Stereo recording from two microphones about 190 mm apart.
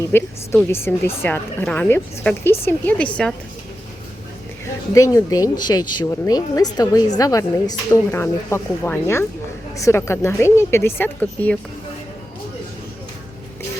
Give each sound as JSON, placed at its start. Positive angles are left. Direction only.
{"t": 0.0, "sound": "speech", "side_deg": 10}
{"t": 4.9, "sound": "speech", "side_deg": 15}